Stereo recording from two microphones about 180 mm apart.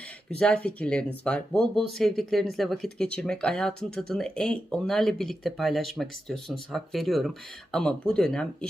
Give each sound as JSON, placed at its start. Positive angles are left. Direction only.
{"t": 0.3, "sound": "speech", "side_deg": 5}